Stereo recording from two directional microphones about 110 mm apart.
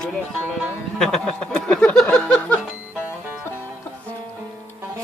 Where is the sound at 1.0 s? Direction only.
5° left (ahead or behind).